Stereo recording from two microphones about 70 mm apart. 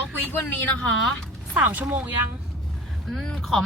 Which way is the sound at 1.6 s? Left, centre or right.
Right.